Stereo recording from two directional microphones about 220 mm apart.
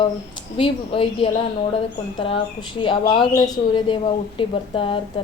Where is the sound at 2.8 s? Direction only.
20° left (ahead or behind).